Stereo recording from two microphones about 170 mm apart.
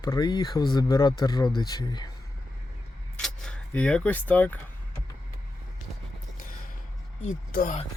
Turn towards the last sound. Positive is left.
turn(degrees=50)  # may be behind; listen again after turning